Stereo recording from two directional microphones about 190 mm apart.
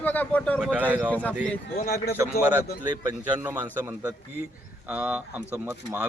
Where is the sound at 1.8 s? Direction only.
55° left (ahead or behind).